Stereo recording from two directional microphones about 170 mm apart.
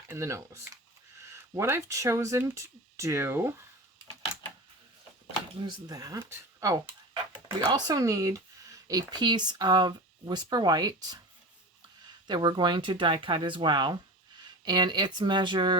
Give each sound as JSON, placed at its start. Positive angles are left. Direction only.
{"t": 0.1, "sound": "speech", "side_deg": -15}
{"t": 5.6, "sound": "speech", "side_deg": -20}
{"t": 12.3, "sound": "speech", "side_deg": -25}